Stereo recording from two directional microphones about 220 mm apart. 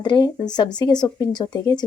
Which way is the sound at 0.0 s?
20° left (ahead or behind).